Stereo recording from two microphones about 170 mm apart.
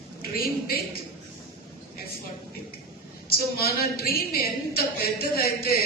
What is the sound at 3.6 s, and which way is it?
A woman's voice, 65° left (ahead or behind).